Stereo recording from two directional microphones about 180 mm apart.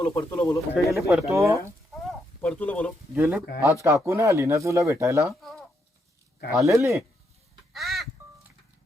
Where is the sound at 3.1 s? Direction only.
15° right (ahead or behind).